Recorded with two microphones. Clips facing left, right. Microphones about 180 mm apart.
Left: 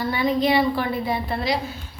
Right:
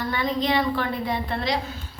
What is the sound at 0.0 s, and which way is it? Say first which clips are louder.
A woman's voice: left 4 dB; 10° left (ahead or behind).